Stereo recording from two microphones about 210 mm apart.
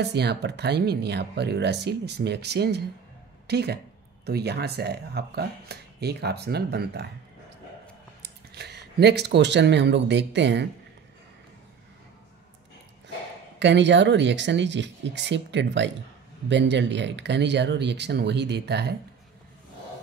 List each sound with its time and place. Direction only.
0.0 s speech: 50° right (ahead or behind)
8.2 s speech: 50° right (ahead or behind)
13.6 s speech: 60° right (ahead or behind)